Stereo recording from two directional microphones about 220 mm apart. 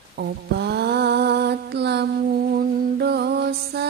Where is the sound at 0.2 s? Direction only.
50° right (ahead or behind).